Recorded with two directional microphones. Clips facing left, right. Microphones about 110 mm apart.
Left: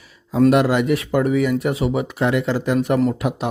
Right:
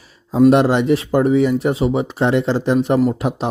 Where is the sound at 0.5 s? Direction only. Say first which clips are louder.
Right 3 dB; 30° right (ahead or behind).